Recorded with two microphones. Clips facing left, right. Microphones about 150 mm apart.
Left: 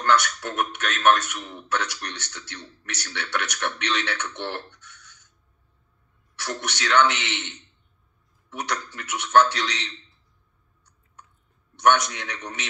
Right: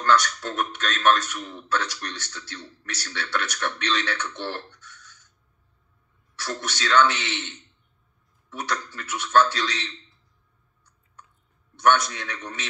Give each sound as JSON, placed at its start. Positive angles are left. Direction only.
{"t": 0.0, "sound": "a man's voice", "side_deg": 20}
{"t": 6.3, "sound": "a man's voice", "side_deg": 20}
{"t": 11.7, "sound": "a man's voice", "side_deg": 20}